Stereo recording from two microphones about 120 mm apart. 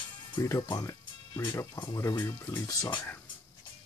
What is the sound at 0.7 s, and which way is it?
Speech, 30° left (ahead or behind).